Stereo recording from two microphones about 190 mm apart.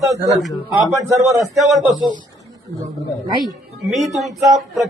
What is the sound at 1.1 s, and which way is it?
Speech, 15° right (ahead or behind).